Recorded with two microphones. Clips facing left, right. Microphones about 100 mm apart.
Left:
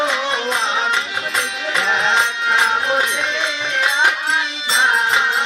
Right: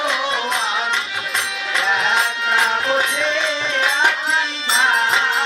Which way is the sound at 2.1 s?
20° left (ahead or behind).